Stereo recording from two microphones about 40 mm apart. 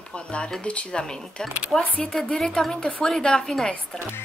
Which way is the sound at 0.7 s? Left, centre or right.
Left.